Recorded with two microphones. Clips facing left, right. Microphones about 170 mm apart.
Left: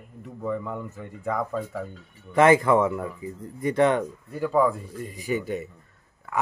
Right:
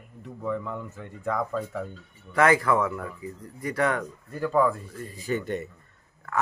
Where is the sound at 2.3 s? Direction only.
20° left (ahead or behind).